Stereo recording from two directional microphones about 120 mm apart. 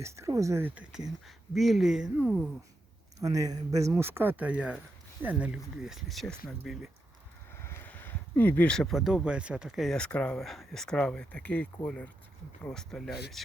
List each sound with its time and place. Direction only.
0.0 s speech: 25° right (ahead or behind)
0.9 s speech: 5° right (ahead or behind)
3.2 s speech: 30° right (ahead or behind)
4.0 s speech: 15° right (ahead or behind); by 6.9 s centre (ahead or behind)
7.5 s speech: 20° left (ahead or behind); by 13.4 s centre (ahead or behind)